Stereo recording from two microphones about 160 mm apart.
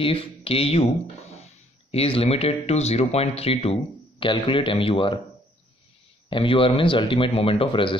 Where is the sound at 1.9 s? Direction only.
35° left (ahead or behind).